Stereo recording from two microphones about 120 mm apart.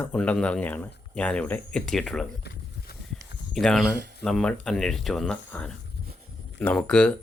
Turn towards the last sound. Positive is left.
turn(degrees=5)  # may be behind; listen again after turning